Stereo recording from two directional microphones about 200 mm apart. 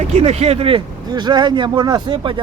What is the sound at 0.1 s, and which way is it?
Speech, 35° right (ahead or behind).